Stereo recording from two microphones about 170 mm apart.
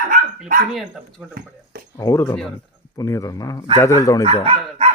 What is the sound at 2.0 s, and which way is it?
Speech, 15° left (ahead or behind).